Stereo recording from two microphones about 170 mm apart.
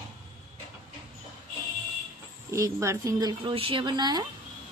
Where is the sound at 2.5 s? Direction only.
20° right (ahead or behind).